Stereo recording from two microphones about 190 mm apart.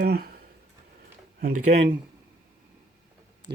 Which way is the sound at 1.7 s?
30° right (ahead or behind).